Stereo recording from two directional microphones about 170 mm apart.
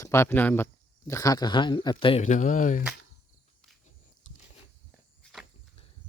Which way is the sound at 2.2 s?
45° left (ahead or behind).